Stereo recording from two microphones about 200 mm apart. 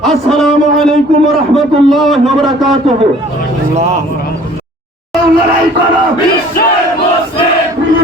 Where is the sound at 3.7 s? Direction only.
35° right (ahead or behind).